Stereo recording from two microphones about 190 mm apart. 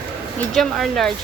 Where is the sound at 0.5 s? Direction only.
Centre (ahead or behind).